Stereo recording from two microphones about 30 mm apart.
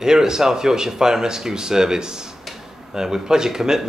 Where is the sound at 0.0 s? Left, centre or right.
Centre.